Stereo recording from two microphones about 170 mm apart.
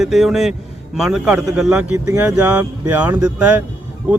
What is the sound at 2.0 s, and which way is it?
Speech, 20° right (ahead or behind).